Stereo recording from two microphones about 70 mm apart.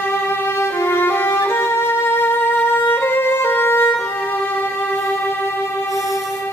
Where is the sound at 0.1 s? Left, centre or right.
Left.